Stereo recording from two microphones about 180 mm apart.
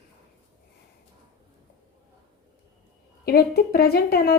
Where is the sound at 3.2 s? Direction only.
60° left (ahead or behind).